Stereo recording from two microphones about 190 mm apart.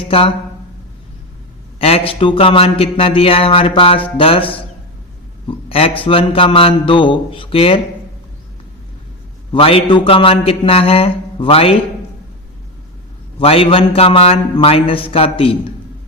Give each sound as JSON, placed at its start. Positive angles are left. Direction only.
{"t": 0.0, "sound": "speech", "side_deg": 30}
{"t": 1.8, "sound": "speech", "side_deg": 30}
{"t": 9.5, "sound": "speech", "side_deg": 30}
{"t": 13.4, "sound": "speech", "side_deg": 30}